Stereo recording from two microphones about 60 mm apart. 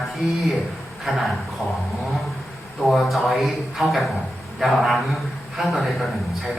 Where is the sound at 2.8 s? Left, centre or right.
Centre.